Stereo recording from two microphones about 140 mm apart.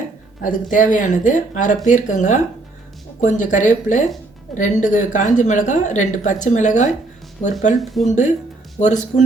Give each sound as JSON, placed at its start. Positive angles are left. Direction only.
{"t": 0.4, "sound": "speech", "side_deg": 70}
{"t": 7.8, "sound": "speech", "side_deg": 0}
{"t": 8.0, "sound": "speech", "side_deg": 60}